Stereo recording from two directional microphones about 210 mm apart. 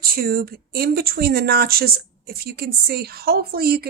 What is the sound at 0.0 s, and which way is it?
Speech, 45° right (ahead or behind).